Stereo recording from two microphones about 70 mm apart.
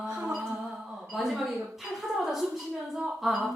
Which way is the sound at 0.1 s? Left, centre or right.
Right.